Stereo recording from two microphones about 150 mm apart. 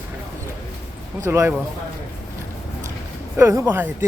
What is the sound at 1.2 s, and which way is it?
Speech, 15° right (ahead or behind).